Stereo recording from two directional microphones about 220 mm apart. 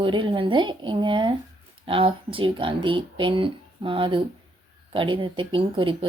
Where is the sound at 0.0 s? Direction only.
25° right (ahead or behind).